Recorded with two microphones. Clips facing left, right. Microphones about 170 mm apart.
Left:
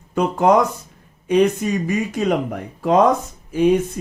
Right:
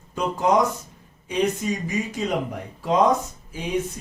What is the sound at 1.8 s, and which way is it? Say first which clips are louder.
Speech: left 6 dB; 60° left (ahead or behind).